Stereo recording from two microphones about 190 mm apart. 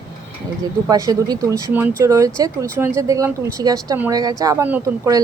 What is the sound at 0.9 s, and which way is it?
A woman's voice, 20° right (ahead or behind).